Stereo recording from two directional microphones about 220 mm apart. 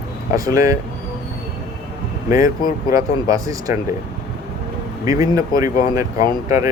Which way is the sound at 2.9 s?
15° right (ahead or behind).